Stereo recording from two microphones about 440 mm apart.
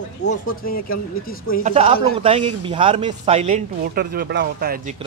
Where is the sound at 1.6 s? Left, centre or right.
Centre.